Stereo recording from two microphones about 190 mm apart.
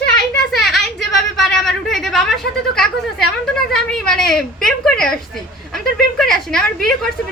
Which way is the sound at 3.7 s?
5° left (ahead or behind).